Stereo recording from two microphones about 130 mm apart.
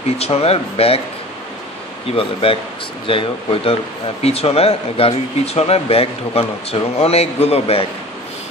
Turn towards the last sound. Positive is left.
turn(degrees=50)  # may be behind; listen again after turning